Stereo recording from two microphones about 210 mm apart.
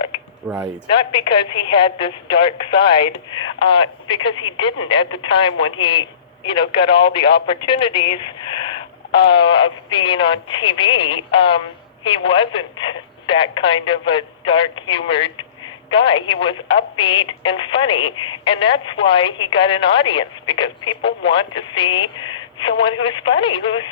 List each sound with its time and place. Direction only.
0.4 s speech: 5° right (ahead or behind)
0.9 s speech: 25° left (ahead or behind)
5.6 s a man's voice: 80° left
6.5 s speech: 25° left (ahead or behind)